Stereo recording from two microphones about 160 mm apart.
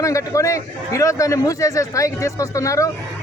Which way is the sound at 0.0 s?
20° left (ahead or behind).